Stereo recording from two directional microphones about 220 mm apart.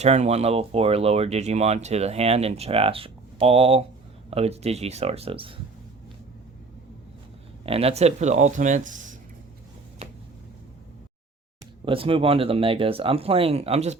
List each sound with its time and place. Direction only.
0.0 s speech: 30° right (ahead or behind)
7.6 s speech: 25° right (ahead or behind)
11.9 s speech: 25° right (ahead or behind)